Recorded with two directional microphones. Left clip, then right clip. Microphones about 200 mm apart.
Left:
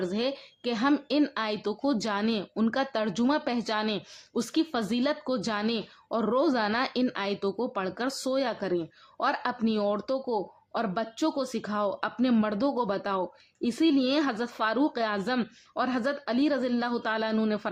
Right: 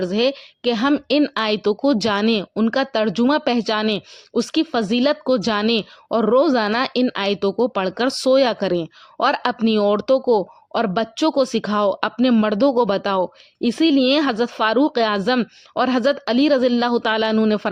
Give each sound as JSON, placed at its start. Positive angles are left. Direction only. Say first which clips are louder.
{"t": 0.0, "sound": "a woman's voice", "louder": "right 11 dB", "side_deg": -40}